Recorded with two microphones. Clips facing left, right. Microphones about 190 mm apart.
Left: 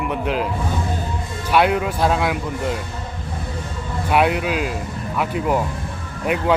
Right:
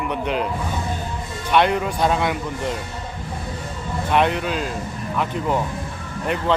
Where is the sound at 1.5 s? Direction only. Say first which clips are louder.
Left 1 dB; 5° left (ahead or behind).